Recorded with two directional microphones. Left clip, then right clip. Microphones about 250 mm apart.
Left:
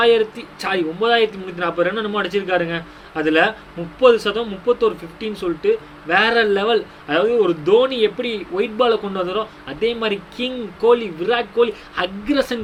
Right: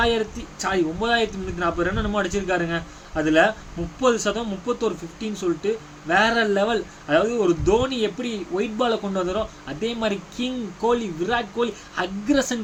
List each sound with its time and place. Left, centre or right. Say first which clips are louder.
0.0 s speech: left 7 dB; centre